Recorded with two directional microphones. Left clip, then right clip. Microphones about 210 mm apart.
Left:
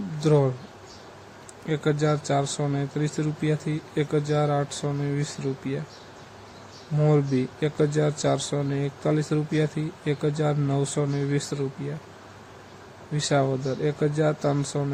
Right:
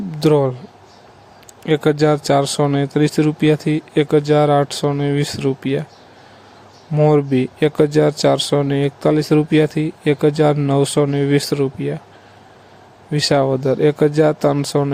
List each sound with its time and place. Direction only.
0.2 s speech: 40° right (ahead or behind)
1.6 s speech: 40° right (ahead or behind)
7.0 s speech: 45° right (ahead or behind)
13.1 s speech: 40° right (ahead or behind)